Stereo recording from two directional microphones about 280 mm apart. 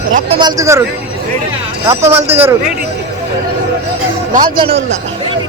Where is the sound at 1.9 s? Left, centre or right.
Centre.